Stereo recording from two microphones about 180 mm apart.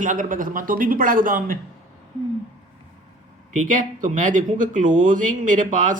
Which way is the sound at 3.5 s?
45° right (ahead or behind).